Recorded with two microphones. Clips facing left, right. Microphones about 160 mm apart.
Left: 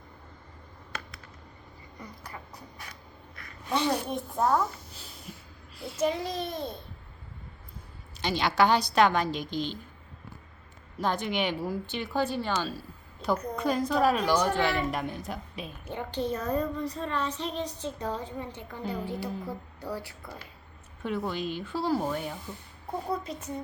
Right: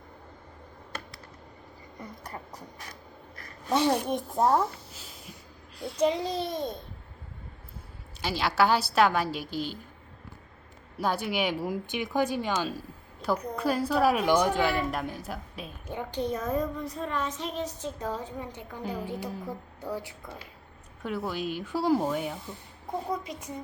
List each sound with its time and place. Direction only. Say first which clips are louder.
2.0 s a sound: right 3 dB; 40° right (ahead or behind)
3.3 s gasp: right 3 dB; 40° right (ahead or behind)
3.8 s a woman's voice: right 3 dB; 20° right (ahead or behind)
4.4 s a woman's voice: right 2 dB; 30° right (ahead or behind)
4.9 s a sound: even; centre (ahead or behind)
6.2 s a child's voice: right 2 dB; 30° right (ahead or behind)
8.2 s a woman's voice: left 1 dB; 5° right (ahead or behind)
10.9 s a woman's voice: even; 10° right (ahead or behind)
21.0 s a woman's voice: left 1 dB; 5° right (ahead or behind)